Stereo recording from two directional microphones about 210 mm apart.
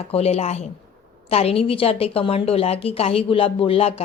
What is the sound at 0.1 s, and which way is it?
A woman's voice, 30° left (ahead or behind).